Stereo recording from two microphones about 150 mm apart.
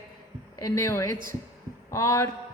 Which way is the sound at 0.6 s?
20° left (ahead or behind).